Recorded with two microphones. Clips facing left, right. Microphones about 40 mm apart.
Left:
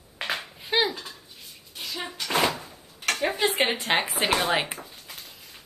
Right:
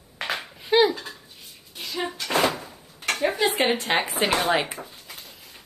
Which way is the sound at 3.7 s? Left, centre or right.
Centre.